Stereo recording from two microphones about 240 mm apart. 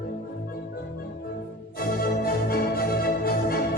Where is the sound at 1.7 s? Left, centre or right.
Left.